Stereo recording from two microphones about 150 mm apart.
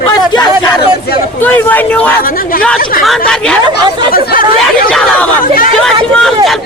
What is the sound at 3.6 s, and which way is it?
Speech, 30° right (ahead or behind).